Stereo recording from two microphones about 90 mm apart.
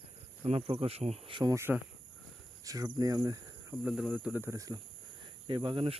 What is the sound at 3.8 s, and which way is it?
Speech, 10° right (ahead or behind).